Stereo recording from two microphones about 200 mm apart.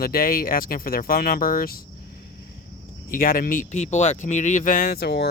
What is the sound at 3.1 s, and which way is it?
Speech, 45° left (ahead or behind).